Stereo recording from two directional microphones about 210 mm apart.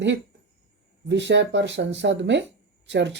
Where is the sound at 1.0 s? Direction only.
55° right (ahead or behind).